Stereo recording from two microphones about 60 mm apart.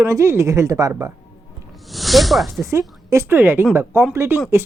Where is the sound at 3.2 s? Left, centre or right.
Right.